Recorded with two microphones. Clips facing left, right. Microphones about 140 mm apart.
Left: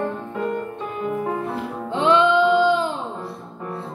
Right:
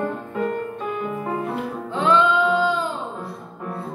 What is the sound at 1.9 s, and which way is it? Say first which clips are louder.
Music: left 2 dB; 25° left (ahead or behind).